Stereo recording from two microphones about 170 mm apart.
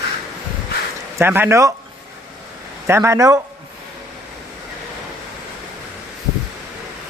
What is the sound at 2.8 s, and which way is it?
Speech, 15° right (ahead or behind).